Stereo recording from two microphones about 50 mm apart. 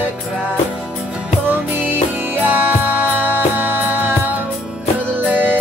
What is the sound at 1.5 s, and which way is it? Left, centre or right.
Music, right.